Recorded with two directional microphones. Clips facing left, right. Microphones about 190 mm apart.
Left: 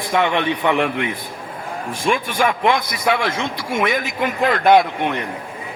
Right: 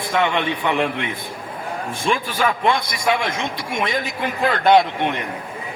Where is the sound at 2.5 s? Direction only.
30° right (ahead or behind).